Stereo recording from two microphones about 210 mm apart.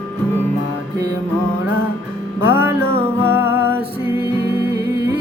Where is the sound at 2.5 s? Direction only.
10° right (ahead or behind).